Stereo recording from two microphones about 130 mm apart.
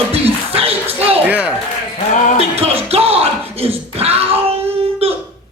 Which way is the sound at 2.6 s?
50° right (ahead or behind).